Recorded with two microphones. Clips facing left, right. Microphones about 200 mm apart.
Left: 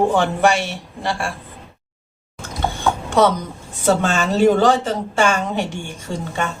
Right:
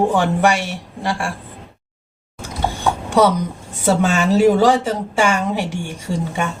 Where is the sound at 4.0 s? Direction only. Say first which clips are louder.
Right 4 dB; 10° right (ahead or behind).